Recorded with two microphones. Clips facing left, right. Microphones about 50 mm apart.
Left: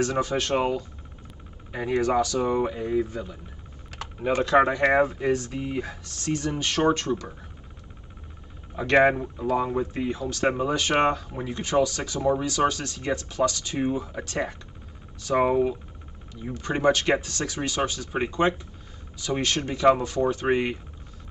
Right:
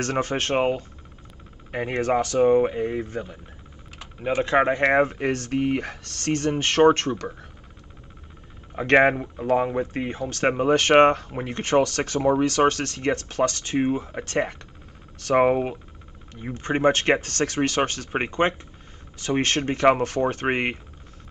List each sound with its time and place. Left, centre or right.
0.0 s speech: right
4.4 s speech: right
4.9 s speech: right
8.7 s speech: right